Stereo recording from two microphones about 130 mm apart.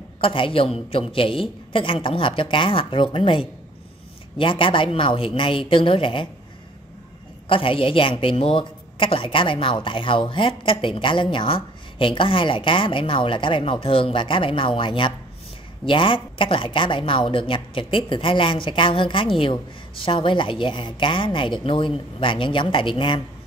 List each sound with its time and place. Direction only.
0.2 s a woman's voice: 45° left (ahead or behind)
7.4 s a woman's voice: 40° left (ahead or behind)